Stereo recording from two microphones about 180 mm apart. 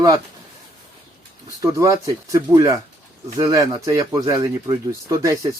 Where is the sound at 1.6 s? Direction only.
20° right (ahead or behind).